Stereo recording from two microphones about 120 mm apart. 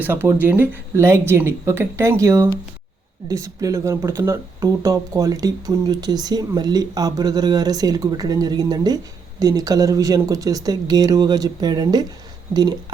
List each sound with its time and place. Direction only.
0.0 s speech: 15° right (ahead or behind); by 12.0 s 35° right (ahead or behind)